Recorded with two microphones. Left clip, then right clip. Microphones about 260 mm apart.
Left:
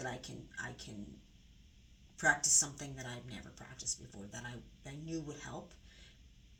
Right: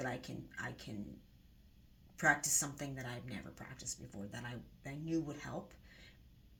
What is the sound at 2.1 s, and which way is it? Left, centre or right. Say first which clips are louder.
Speech: left 2 dB; right.